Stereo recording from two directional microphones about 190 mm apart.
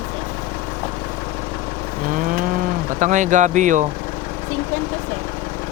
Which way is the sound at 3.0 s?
40° right (ahead or behind).